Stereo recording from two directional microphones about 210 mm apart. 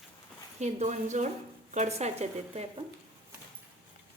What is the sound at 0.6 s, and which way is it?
A woman's voice, 35° right (ahead or behind).